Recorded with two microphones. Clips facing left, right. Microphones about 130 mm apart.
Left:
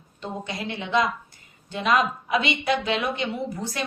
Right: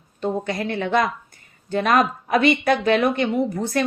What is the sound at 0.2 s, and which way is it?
A woman's voice, 50° right (ahead or behind).